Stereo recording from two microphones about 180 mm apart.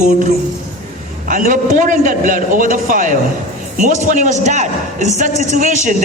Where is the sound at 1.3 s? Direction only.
50° right (ahead or behind).